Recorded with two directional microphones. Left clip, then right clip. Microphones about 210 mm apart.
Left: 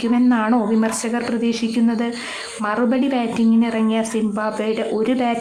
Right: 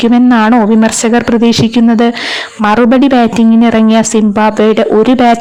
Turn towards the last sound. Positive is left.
turn(degrees=-45)  # may be behind; listen again after turning